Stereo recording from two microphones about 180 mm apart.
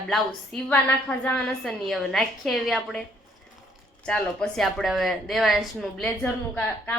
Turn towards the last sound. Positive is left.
turn(degrees=10)  # may be behind; listen again after turning